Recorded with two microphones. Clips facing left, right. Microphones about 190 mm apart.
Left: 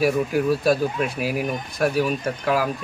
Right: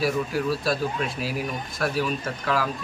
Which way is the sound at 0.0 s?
15° left (ahead or behind).